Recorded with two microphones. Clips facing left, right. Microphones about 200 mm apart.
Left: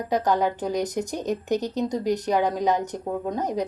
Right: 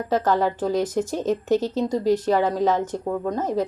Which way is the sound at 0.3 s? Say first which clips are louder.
Right 2 dB; 15° left (ahead or behind).